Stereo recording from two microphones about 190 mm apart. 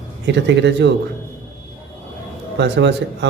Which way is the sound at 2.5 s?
65° right (ahead or behind).